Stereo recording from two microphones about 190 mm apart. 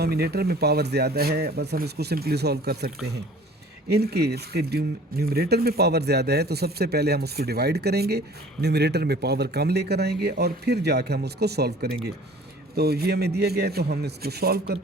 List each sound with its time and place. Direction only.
0.0 s speech: 55° right (ahead or behind)